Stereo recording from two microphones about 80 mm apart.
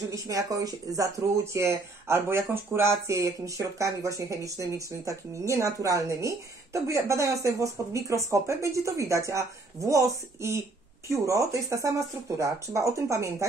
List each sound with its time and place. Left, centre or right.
0.1 s speech: right